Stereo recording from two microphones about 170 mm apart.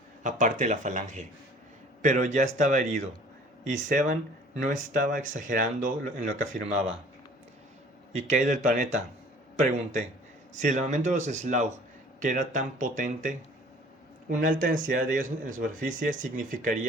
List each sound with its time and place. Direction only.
0.2 s speech: 50° right (ahead or behind)
8.1 s speech: 45° right (ahead or behind)
14.3 s speech: 50° right (ahead or behind)